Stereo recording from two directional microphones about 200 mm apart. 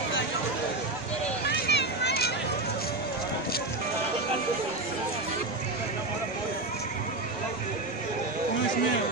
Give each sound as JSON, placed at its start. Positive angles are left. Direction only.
{"t": 1.5, "sound": "vehicle", "side_deg": 60}